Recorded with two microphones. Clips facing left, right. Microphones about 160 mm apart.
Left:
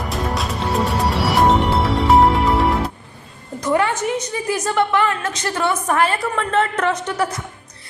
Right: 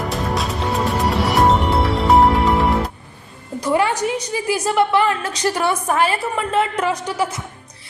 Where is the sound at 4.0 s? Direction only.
10° right (ahead or behind).